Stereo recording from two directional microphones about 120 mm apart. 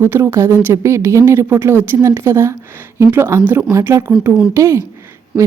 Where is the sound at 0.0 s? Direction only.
20° right (ahead or behind).